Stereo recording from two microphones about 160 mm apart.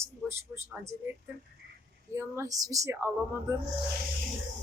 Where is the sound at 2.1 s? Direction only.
20° right (ahead or behind).